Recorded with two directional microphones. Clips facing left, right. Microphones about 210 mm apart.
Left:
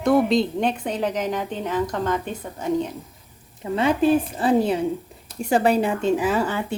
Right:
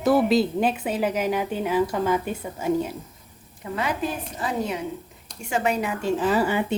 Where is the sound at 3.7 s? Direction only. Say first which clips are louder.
Left 9 dB; 30° left (ahead or behind).